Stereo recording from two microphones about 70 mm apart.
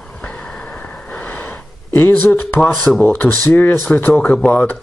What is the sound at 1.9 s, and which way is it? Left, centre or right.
Speech, left.